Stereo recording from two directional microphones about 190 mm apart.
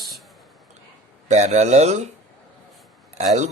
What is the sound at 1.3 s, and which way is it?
Speech, 35° right (ahead or behind).